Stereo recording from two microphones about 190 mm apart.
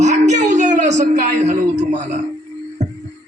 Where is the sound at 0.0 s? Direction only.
40° right (ahead or behind).